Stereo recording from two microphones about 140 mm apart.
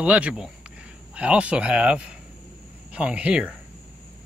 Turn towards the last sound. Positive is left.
turn(degrees=-10)  # may be behind; listen again after turning